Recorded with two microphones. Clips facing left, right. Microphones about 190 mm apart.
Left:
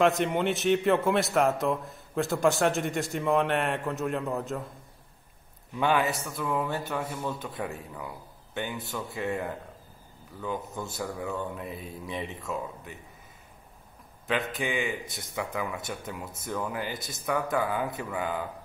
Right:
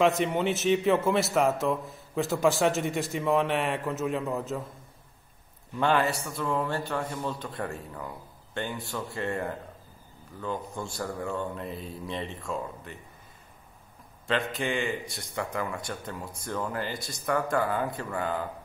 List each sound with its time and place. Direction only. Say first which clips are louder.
0.0 s a man's voice: even; centre (ahead or behind)
5.8 s a man's voice: right 1 dB; 5° left (ahead or behind)
14.2 s a man's voice: right 1 dB; centre (ahead or behind)
15.0 s speech: right 1 dB; 20° left (ahead or behind)
15.3 s a man's voice: even; centre (ahead or behind)